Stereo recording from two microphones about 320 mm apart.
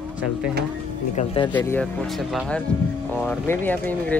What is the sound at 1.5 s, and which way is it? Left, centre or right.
Speech, centre.